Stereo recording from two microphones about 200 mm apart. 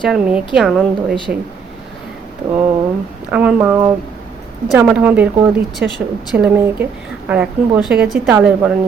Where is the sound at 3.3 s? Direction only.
10° right (ahead or behind).